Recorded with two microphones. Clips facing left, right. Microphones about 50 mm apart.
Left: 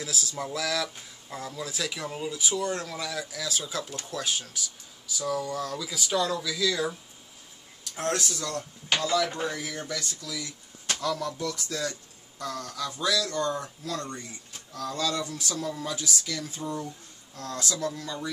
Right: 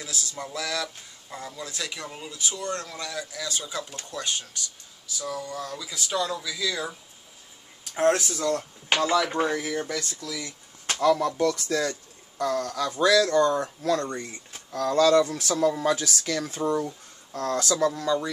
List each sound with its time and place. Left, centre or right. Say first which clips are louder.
0.0 s speech: left 2 dB; centre
7.8 s speech: right 7 dB; right
11.0 s speech: right 10 dB; right
14.7 s speech: right 10 dB; right
17.9 s speech: right 9 dB; right